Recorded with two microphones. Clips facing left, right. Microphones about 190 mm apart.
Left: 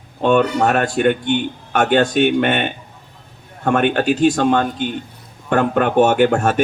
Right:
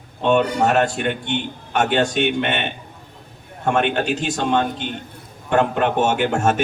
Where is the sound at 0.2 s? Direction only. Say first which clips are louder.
Left 2 dB; 50° left (ahead or behind).